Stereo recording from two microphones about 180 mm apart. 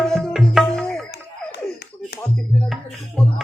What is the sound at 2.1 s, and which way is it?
Music, 60° left (ahead or behind).